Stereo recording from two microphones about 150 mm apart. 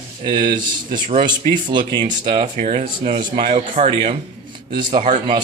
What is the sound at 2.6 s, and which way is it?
A man's voice, 45° right (ahead or behind).